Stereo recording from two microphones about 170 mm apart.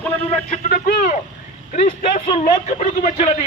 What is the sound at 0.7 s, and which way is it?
A man's voice, 55° left (ahead or behind).